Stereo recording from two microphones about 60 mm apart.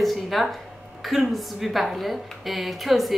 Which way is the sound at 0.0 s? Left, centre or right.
Centre.